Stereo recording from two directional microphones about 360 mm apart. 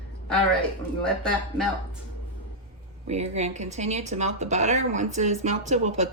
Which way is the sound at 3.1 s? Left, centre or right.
Centre.